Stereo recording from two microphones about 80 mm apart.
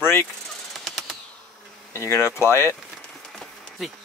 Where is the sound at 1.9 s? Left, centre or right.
Left.